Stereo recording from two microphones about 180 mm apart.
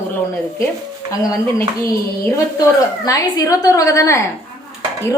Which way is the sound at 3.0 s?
20° left (ahead or behind).